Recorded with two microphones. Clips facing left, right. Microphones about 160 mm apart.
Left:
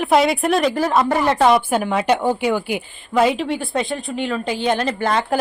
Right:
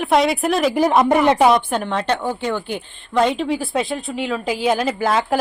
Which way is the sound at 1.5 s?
10° left (ahead or behind).